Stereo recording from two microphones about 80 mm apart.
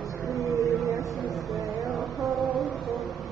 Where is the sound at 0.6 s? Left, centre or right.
Right.